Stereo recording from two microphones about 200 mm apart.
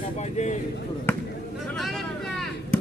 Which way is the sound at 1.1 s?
10° left (ahead or behind).